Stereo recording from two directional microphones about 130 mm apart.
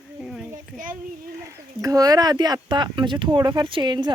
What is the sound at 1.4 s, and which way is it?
Speech, 25° right (ahead or behind).